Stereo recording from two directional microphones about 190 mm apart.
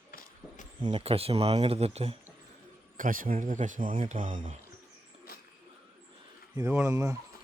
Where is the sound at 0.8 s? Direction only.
25° right (ahead or behind).